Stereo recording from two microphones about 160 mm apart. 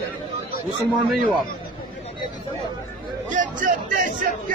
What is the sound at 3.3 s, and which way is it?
Speech, 50° right (ahead or behind).